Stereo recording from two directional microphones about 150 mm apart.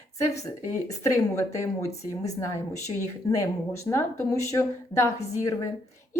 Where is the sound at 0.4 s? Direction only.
20° left (ahead or behind).